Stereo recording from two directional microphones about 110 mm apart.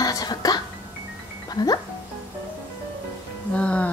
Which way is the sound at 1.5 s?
40° left (ahead or behind).